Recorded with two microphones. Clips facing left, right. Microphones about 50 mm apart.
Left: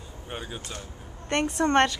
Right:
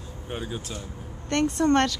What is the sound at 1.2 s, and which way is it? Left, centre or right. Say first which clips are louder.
Speech: right 2 dB; left.